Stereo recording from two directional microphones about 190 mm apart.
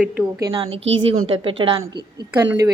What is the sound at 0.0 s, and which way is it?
Speech, 5° right (ahead or behind).